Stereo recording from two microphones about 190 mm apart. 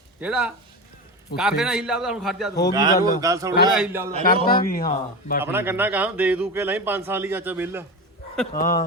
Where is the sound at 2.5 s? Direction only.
20° left (ahead or behind).